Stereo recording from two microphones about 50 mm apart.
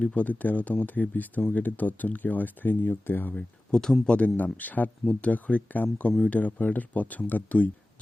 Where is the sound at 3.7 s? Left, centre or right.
Centre.